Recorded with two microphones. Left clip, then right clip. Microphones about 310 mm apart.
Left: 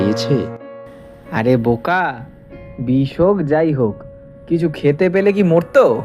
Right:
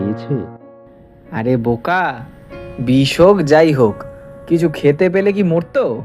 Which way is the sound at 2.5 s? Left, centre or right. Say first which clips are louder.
Right 3 dB; right.